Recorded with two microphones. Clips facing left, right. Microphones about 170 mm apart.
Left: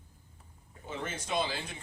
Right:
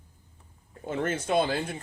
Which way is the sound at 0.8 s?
55° right (ahead or behind).